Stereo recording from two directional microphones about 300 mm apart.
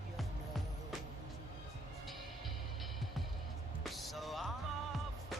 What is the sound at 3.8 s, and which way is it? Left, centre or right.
Music, centre.